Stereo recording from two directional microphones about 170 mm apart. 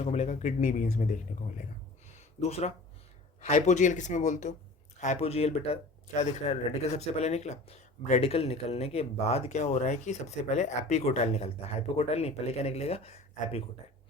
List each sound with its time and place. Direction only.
0.0 s speech: 40° left (ahead or behind)
2.0 s a sound: 40° left (ahead or behind)
3.4 s speech: 45° left (ahead or behind)